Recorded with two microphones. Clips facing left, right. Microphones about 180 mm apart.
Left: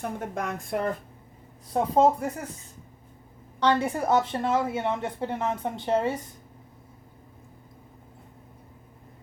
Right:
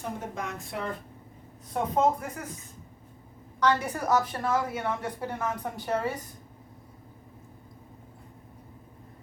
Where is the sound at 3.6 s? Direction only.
25° left (ahead or behind).